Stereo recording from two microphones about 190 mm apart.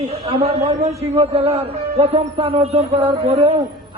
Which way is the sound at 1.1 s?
30° right (ahead or behind).